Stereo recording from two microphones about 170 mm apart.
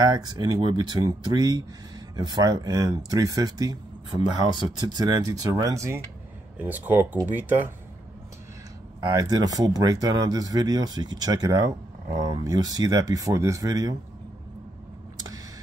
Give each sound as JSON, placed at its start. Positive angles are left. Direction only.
{"t": 0.0, "sound": "speech", "side_deg": -25}
{"t": 9.0, "sound": "speech", "side_deg": -20}
{"t": 15.1, "sound": "a sound", "side_deg": -20}